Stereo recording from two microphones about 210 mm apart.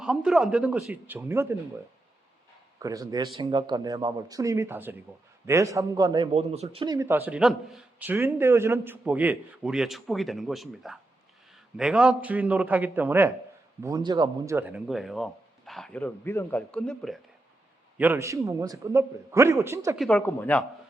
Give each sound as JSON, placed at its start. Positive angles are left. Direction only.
{"t": 0.0, "sound": "speech", "side_deg": -5}
{"t": 2.7, "sound": "a man's voice", "side_deg": -15}
{"t": 6.3, "sound": "speech", "side_deg": -30}
{"t": 6.8, "sound": "a man's voice", "side_deg": -15}
{"t": 17.9, "sound": "a man's voice", "side_deg": -10}
{"t": 20.0, "sound": "speech", "side_deg": 5}